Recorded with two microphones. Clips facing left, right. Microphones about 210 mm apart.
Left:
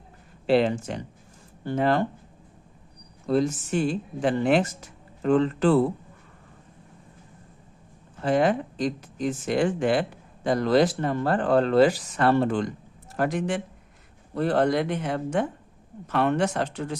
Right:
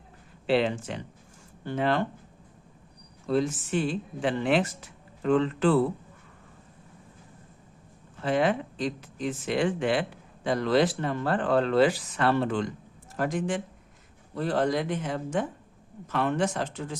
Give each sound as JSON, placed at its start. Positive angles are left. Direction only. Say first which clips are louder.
{"t": 0.4, "sound": "speech", "louder": "left 4 dB", "side_deg": 40}
{"t": 3.2, "sound": "speech", "louder": "left 3 dB", "side_deg": 40}
{"t": 8.2, "sound": "speech", "louder": "left 3 dB", "side_deg": 40}
{"t": 13.1, "sound": "speech", "louder": "left 2 dB", "side_deg": 65}